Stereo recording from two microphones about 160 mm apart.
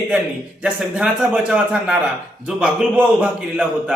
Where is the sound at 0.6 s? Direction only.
5° right (ahead or behind).